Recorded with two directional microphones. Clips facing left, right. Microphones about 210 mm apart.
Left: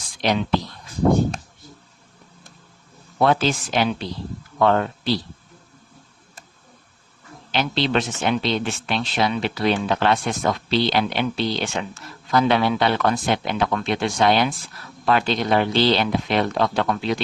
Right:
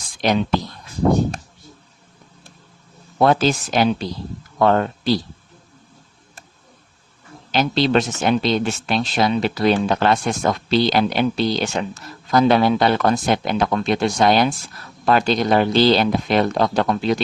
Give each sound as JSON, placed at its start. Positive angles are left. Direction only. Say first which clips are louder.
{"t": 0.2, "sound": "speech", "louder": "right 3 dB", "side_deg": -45}
{"t": 3.2, "sound": "speech", "louder": "right 3 dB", "side_deg": -40}
{"t": 7.5, "sound": "speech", "louder": "right 4 dB", "side_deg": -40}